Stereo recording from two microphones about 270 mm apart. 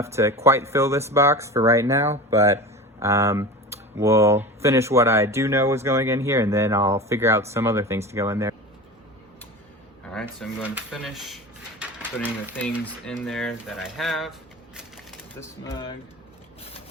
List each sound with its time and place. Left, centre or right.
0.0 s speech: centre
10.1 s speech: centre
11.8 s a sound: centre
12.5 s speech: centre
15.4 s speech: centre